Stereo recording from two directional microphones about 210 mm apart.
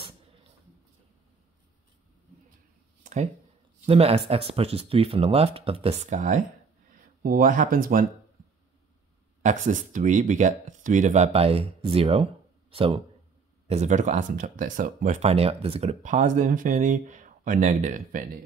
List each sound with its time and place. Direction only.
3.0 s a sound: 35° right (ahead or behind)
3.8 s speech: 30° right (ahead or behind)
9.4 s speech: 35° right (ahead or behind)